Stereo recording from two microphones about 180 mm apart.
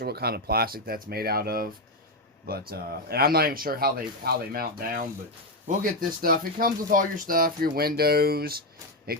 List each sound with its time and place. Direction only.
0.0 s speech: 60° right (ahead or behind)